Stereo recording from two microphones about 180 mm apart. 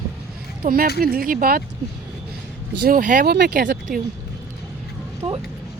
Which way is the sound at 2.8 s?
50° right (ahead or behind).